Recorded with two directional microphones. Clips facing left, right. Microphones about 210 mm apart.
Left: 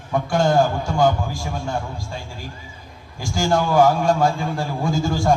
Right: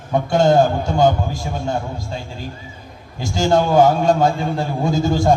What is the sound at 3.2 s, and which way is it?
A man's voice, 20° right (ahead or behind).